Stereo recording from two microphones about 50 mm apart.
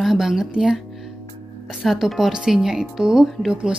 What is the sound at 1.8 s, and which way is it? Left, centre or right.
Speech, centre.